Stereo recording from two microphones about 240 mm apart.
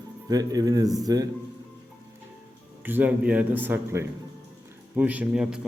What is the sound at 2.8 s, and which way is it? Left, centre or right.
A man's voice, centre.